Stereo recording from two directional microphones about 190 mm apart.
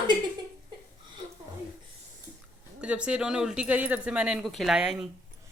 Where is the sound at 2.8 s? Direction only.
5° right (ahead or behind).